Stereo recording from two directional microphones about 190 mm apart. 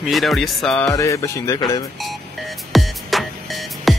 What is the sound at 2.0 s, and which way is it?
Music, centre (ahead or behind).